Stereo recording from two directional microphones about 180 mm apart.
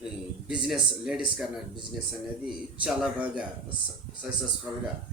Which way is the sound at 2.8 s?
5° right (ahead or behind).